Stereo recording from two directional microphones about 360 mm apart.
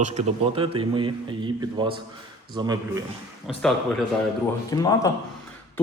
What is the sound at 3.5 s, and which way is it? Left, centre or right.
Speech, centre.